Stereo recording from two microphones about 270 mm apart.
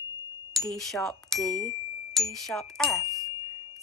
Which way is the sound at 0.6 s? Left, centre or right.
Centre.